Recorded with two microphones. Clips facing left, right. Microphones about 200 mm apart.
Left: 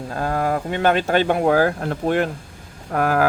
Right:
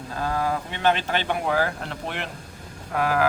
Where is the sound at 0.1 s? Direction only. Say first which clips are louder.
Left 4 dB; 50° left (ahead or behind).